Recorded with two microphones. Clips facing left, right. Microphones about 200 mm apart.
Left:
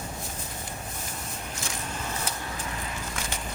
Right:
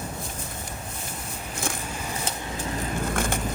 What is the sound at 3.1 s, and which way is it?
Vehicle, 55° right (ahead or behind).